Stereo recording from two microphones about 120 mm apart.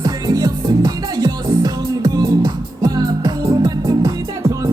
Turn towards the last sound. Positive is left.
turn(degrees=-35)  # may be behind; listen again after turning